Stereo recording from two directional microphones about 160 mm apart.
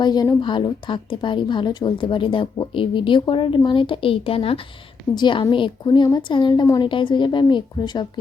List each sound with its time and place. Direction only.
0.0 s a woman's voice: 25° left (ahead or behind)